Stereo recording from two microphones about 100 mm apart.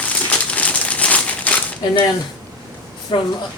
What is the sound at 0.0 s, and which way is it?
Crumpling, 15° left (ahead or behind).